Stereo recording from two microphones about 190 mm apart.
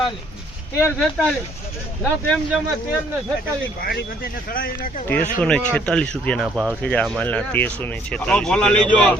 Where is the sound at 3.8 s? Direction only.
50° left (ahead or behind).